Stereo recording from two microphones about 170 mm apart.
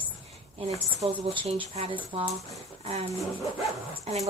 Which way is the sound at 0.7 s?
35° right (ahead or behind).